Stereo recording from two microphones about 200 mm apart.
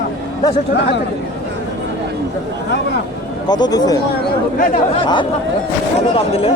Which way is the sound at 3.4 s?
20° left (ahead or behind).